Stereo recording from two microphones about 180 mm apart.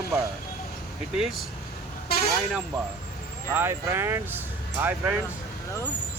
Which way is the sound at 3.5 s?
15° right (ahead or behind).